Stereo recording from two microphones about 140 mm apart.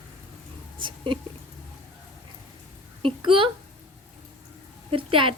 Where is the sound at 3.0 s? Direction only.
35° right (ahead or behind).